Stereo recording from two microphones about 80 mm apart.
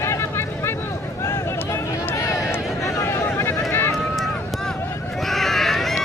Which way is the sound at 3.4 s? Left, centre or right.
Left.